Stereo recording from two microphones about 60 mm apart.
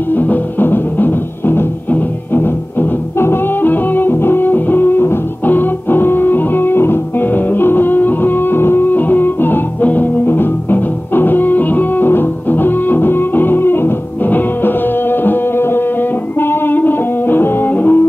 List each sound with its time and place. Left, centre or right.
0.1 s music: left